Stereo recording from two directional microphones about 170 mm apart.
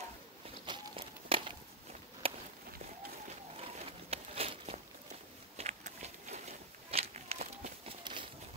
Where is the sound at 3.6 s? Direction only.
35° right (ahead or behind).